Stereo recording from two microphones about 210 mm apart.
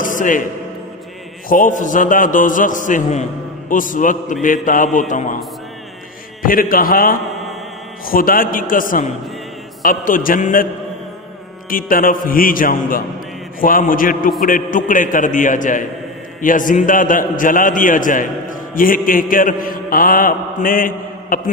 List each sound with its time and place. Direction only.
0.0 s music: 40° left (ahead or behind)
1.5 s a man's voice: 40° left (ahead or behind)
6.4 s a man's voice: 40° left (ahead or behind)
11.7 s a man's voice: 40° left (ahead or behind)